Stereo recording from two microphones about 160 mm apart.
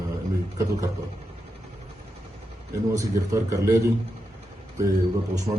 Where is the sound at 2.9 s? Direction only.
20° right (ahead or behind).